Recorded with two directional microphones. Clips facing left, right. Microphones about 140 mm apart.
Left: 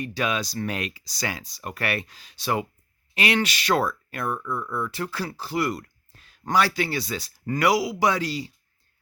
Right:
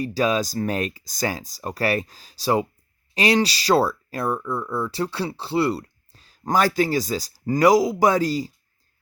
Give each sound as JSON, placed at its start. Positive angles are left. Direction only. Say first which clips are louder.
{"t": 0.0, "sound": "speech", "louder": "right 5 dB", "side_deg": -35}